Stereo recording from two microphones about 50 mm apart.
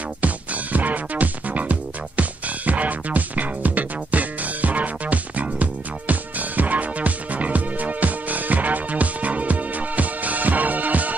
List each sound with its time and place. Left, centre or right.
0.2 s music: right